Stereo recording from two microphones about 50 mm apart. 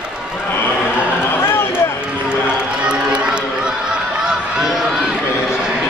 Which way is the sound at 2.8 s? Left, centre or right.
Right.